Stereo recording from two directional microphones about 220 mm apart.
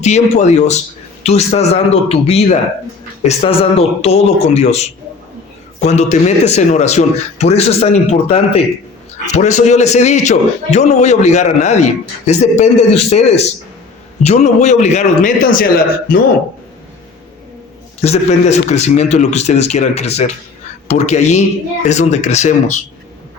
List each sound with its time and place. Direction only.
0.0 s a man's voice: 30° left (ahead or behind)
18.0 s a man's voice: 30° left (ahead or behind)